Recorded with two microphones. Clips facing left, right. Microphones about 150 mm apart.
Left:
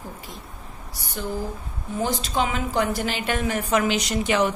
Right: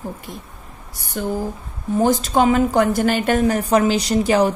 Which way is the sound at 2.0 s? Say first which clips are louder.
Right 8 dB; 45° right (ahead or behind).